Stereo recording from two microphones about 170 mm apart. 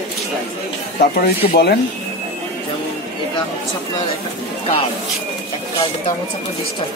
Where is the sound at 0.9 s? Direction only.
65° left (ahead or behind).